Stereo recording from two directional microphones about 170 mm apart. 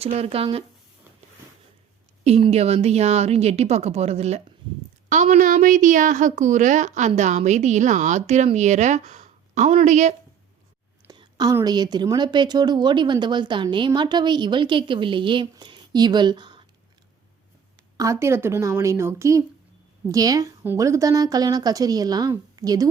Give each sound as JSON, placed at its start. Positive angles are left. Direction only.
{"t": 0.0, "sound": "a woman's voice", "side_deg": -35}
{"t": 2.2, "sound": "a woman's voice", "side_deg": -40}
{"t": 11.1, "sound": "speech", "side_deg": -25}
{"t": 17.9, "sound": "speech", "side_deg": -20}